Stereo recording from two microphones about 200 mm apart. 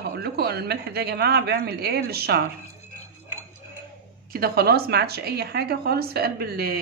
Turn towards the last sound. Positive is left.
turn(degrees=-50)  # may be behind; listen again after turning